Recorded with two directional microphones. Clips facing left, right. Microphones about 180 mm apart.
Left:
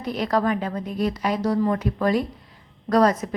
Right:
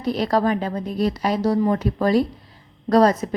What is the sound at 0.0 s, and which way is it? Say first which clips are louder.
A woman's voice: right 3 dB; 35° right (ahead or behind).